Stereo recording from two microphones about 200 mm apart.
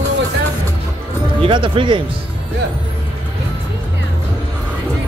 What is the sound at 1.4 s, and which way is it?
Speech, 25° right (ahead or behind).